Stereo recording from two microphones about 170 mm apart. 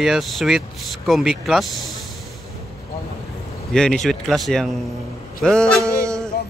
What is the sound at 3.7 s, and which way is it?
Speech, 5° left (ahead or behind).